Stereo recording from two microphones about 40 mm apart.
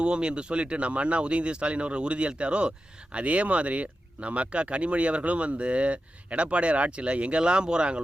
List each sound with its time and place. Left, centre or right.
0.0 s speech: right